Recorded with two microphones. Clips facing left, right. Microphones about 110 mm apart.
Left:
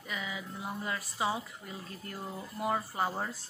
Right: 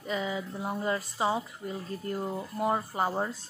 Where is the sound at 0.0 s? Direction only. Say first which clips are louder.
Right 7 dB; 30° right (ahead or behind).